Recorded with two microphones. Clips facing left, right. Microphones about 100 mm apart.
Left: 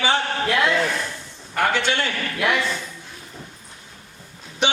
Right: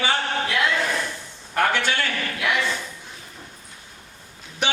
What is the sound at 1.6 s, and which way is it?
Speech, 20° left (ahead or behind).